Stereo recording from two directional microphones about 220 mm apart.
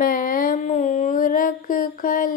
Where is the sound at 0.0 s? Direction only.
40° left (ahead or behind).